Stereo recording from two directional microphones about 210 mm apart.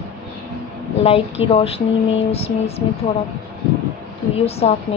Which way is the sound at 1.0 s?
25° left (ahead or behind).